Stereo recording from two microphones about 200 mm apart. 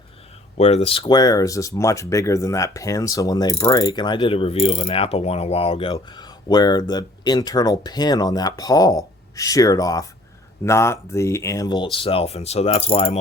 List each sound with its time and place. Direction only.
0.5 s speech: 30° left (ahead or behind)